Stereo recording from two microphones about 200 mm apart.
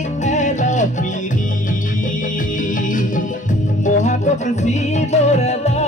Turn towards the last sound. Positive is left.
turn(degrees=35)  # may be behind; listen again after turning